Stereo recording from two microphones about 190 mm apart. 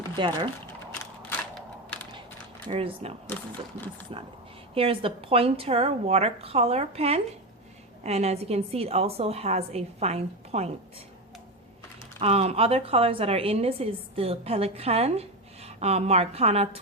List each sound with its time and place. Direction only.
0.2 s speech: 25° right (ahead or behind)
2.6 s a woman's voice: 30° right (ahead or behind)
4.1 s a woman's voice: 25° right (ahead or behind)
12.2 s a woman's voice: 35° right (ahead or behind)